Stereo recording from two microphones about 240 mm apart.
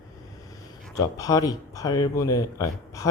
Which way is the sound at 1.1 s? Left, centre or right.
Centre.